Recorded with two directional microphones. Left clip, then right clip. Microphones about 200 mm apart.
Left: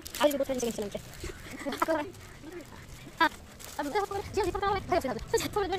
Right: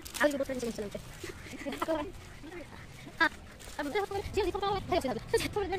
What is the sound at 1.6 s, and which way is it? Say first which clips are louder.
Speech: left 4 dB; 25° left (ahead or behind).